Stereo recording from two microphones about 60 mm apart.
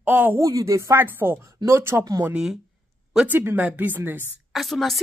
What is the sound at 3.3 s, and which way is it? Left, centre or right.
Speech, right.